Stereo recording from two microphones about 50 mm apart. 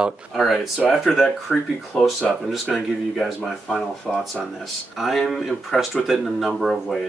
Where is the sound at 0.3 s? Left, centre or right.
Centre.